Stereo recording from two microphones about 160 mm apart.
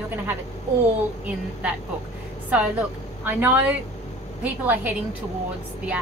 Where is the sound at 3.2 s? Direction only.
10° right (ahead or behind).